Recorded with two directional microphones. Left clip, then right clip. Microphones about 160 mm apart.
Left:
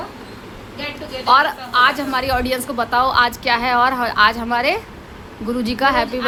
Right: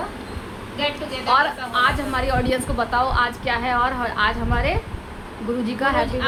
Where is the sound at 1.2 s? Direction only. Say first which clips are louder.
Left 4 dB; 40° left (ahead or behind).